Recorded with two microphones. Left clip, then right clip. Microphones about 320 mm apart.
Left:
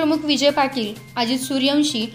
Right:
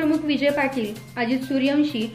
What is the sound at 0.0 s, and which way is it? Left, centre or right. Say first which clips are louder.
A woman's voice: left 3 dB; left.